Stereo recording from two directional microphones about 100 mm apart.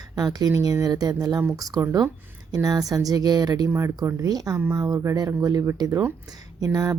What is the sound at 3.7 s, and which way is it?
Speech, 30° right (ahead or behind).